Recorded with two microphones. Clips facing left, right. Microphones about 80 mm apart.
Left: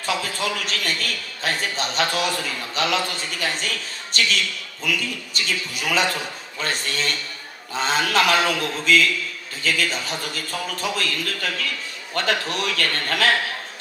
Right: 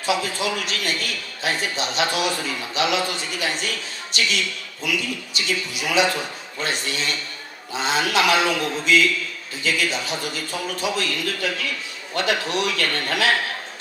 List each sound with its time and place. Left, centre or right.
0.0 s a man's voice: left